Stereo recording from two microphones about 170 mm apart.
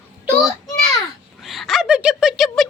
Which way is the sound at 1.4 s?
Centre (ahead or behind).